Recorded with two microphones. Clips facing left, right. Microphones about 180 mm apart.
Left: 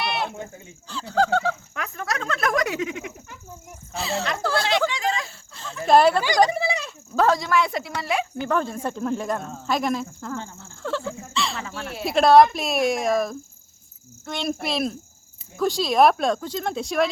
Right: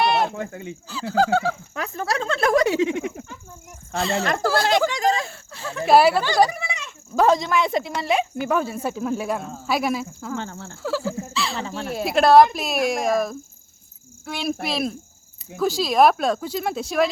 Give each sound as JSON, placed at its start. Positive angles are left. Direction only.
{"t": 0.0, "sound": "sheep", "side_deg": -45}
{"t": 0.3, "sound": "speech", "side_deg": -80}
{"t": 0.9, "sound": "speech", "side_deg": -5}
{"t": 1.7, "sound": "speech", "side_deg": -35}
{"t": 3.9, "sound": "speech", "side_deg": 0}
{"t": 4.9, "sound": "speech", "side_deg": -40}
{"t": 5.8, "sound": "speech", "side_deg": -5}
{"t": 6.5, "sound": "a sound", "side_deg": 30}
{"t": 7.2, "sound": "speech", "side_deg": -20}
{"t": 10.3, "sound": "speech", "side_deg": -80}
{"t": 10.8, "sound": "a sound", "side_deg": -5}
{"t": 11.6, "sound": "dog", "side_deg": -30}
{"t": 12.0, "sound": "speech", "side_deg": 0}